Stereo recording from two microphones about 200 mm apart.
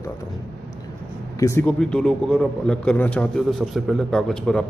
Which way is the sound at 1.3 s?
15° left (ahead or behind).